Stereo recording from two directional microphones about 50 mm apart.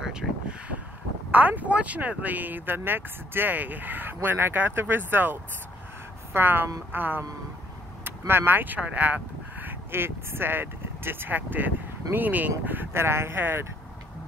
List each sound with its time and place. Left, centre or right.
0.0 s a sound: centre
1.3 s speech: right
12.9 s speech: right